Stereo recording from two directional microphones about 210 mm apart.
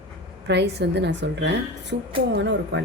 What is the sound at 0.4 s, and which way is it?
A woman's voice, 55° right (ahead or behind).